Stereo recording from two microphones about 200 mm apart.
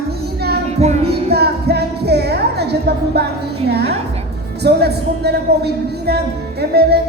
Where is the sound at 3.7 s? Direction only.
55° right (ahead or behind).